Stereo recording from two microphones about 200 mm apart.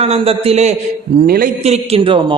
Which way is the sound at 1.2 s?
50° right (ahead or behind).